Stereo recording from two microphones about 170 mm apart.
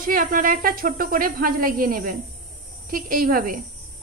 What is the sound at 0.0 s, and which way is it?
Speech, 55° right (ahead or behind).